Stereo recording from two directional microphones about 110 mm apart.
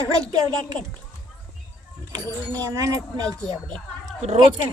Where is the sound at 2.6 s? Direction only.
30° right (ahead or behind).